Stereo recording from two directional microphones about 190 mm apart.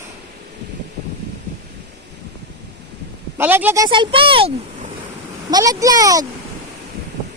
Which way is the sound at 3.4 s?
10° right (ahead or behind).